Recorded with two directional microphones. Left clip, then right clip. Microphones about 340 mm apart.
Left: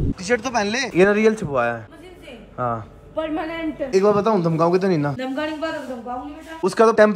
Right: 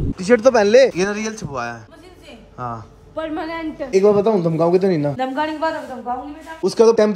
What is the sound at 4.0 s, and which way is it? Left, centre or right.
A man's voice, centre.